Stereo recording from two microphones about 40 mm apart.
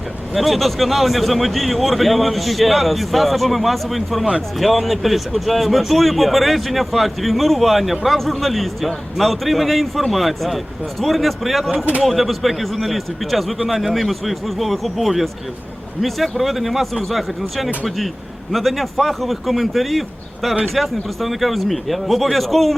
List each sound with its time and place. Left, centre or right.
0.3 s speech: centre
11.7 s speech: right
12.0 s speech: centre